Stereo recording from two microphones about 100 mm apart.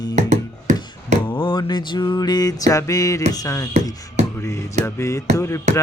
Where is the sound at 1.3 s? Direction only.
55° left (ahead or behind).